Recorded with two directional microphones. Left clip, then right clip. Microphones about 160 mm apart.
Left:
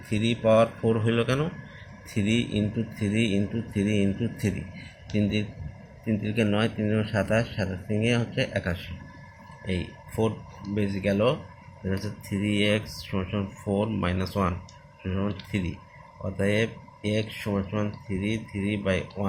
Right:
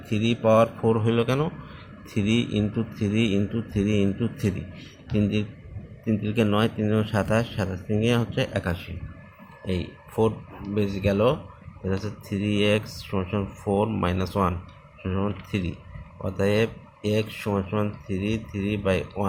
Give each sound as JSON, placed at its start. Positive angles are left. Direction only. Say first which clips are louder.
{"t": 0.1, "sound": "speech", "louder": "right 1 dB", "side_deg": -25}